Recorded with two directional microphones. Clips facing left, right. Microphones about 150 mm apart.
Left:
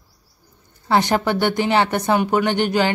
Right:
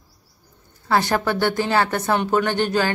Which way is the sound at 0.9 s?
20° left (ahead or behind).